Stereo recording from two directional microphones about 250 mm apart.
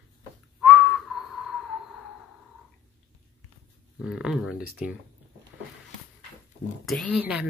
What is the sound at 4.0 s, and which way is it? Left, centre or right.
Speech, centre.